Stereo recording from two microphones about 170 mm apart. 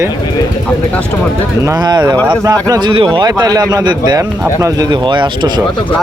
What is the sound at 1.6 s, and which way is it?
Speech, 20° right (ahead or behind).